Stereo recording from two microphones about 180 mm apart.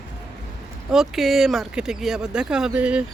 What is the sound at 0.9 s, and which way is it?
Speech, centre (ahead or behind).